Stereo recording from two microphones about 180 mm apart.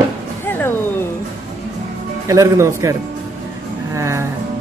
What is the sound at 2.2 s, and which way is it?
Speech, 15° right (ahead or behind).